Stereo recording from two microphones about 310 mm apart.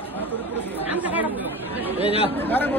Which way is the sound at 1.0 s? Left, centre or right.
Centre.